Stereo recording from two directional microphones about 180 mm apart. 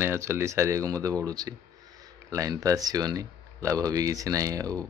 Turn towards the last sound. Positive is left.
turn(degrees=-20)  # may be behind; listen again after turning